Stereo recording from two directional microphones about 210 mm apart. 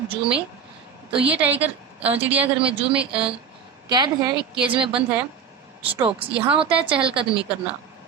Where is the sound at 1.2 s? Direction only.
5° right (ahead or behind).